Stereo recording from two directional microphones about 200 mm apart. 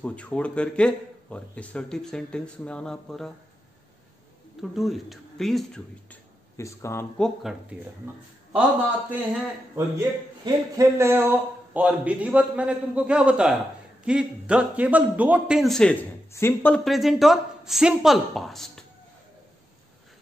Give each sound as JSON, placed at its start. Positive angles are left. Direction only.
{"t": 0.0, "sound": "a man's voice", "side_deg": 5}
{"t": 4.6, "sound": "a man's voice", "side_deg": 0}
{"t": 6.5, "sound": "speech", "side_deg": 15}
{"t": 7.2, "sound": "a man's voice", "side_deg": 0}
{"t": 9.1, "sound": "a man's voice", "side_deg": -10}